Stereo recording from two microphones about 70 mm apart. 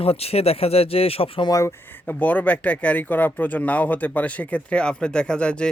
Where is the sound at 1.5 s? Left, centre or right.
Left.